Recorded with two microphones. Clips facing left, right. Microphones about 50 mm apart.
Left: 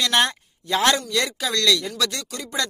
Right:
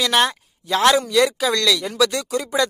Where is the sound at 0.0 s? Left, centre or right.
Centre.